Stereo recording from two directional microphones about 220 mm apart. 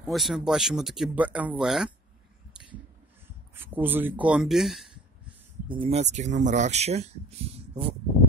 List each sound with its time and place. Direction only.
0.0 s speech: centre (ahead or behind)
3.7 s speech: 10° right (ahead or behind)
5.7 s speech: 25° right (ahead or behind)